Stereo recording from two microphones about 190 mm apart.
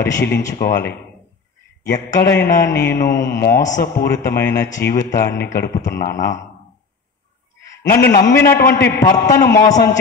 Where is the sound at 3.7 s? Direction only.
55° left (ahead or behind).